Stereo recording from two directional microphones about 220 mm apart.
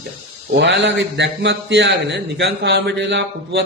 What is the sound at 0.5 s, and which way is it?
Speech, 55° right (ahead or behind).